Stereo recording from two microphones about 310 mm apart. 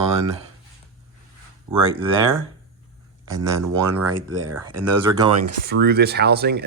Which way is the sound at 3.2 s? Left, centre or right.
Centre.